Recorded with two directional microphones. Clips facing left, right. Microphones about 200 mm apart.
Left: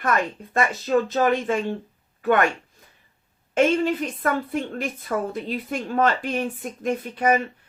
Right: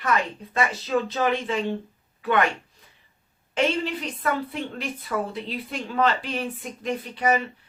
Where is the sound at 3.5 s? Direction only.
50° left (ahead or behind).